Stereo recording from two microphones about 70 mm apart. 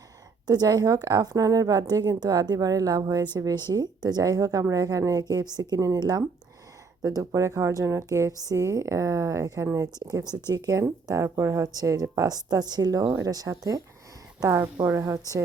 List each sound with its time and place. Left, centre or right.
0.4 s a woman's voice: right
3.3 s a woman's voice: right
5.2 s a woman's voice: right
7.3 s a woman's voice: right
8.4 s a woman's voice: right
11.1 s a woman's voice: right
14.4 s a woman's voice: right